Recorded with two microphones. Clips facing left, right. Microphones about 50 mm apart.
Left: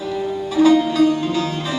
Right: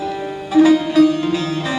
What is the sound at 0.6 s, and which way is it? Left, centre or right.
Music, centre.